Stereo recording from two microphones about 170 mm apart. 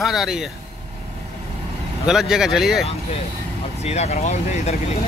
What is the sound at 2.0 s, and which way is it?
Speech, 5° right (ahead or behind).